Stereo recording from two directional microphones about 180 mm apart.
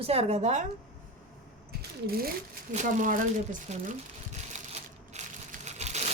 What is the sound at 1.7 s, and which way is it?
Sewing machine, 60° right (ahead or behind).